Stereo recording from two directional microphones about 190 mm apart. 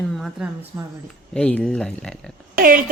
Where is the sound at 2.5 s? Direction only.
50° right (ahead or behind).